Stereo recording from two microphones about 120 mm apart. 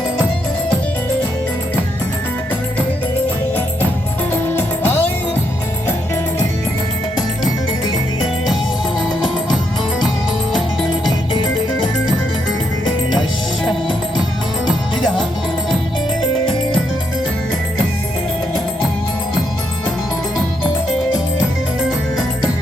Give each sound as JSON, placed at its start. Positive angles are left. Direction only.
{"t": 4.3, "sound": "music", "side_deg": 20}
{"t": 9.0, "sound": "music", "side_deg": 0}